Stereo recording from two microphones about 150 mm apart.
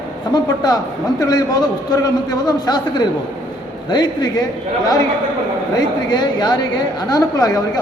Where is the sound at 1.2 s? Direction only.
25° left (ahead or behind).